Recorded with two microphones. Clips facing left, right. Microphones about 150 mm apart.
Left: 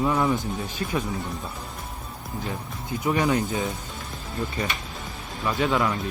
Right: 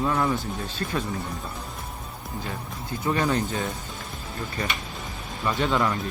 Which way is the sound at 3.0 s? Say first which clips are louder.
Left 1 dB; 15° left (ahead or behind).